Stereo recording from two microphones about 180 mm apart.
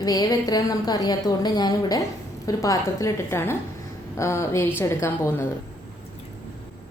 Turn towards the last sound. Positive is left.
turn(degrees=15)  # may be behind; listen again after turning